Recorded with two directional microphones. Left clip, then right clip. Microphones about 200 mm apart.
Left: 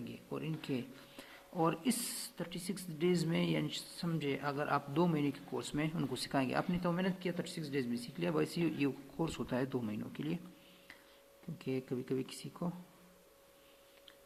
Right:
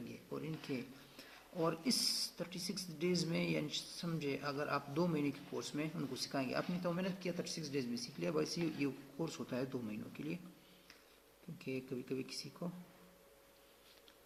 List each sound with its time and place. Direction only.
0.3 s a sound: 35° left (ahead or behind)
1.5 s speech: 35° left (ahead or behind)
11.6 s speech: 40° left (ahead or behind)